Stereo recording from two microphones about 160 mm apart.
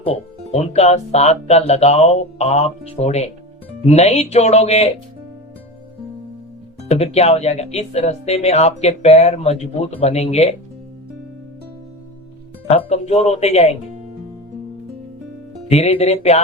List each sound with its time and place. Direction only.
0.0 s speech: 40° left (ahead or behind)
6.8 s speech: 40° left (ahead or behind)
12.6 s speech: 40° left (ahead or behind)
15.7 s speech: 40° left (ahead or behind)